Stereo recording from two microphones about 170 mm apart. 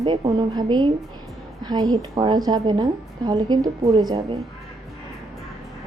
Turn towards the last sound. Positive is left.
turn(degrees=-25)  # may be behind; listen again after turning